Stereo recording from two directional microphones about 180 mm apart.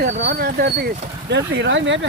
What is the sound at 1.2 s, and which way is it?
Speech, 75° right (ahead or behind).